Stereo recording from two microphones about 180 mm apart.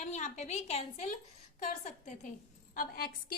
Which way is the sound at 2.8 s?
55° left (ahead or behind).